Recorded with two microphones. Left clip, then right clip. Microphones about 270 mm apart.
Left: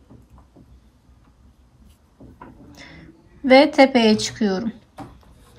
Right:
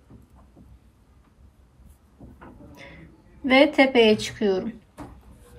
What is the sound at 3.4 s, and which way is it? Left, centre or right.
A woman's voice, centre.